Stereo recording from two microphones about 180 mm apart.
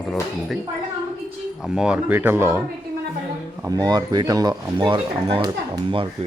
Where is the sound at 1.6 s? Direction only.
5° right (ahead or behind).